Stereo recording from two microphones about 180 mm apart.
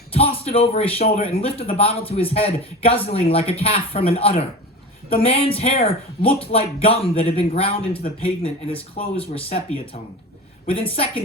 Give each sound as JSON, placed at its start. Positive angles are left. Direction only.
{"t": 0.1, "sound": "a man's voice", "side_deg": 30}